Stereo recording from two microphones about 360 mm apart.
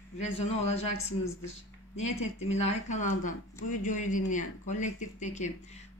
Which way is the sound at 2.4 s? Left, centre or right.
Centre.